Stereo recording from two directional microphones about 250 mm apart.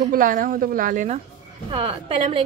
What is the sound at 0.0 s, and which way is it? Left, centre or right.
A woman's voice, right.